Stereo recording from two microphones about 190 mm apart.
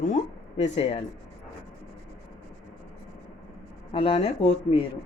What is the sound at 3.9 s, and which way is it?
Speech, 30° left (ahead or behind).